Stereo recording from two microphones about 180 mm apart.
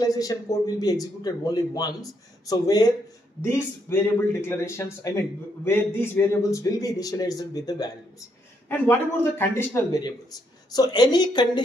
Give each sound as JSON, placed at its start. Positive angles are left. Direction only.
{"t": 0.0, "sound": "a man's voice", "side_deg": 20}